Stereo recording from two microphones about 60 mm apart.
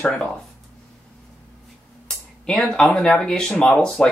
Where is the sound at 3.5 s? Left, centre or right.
Left.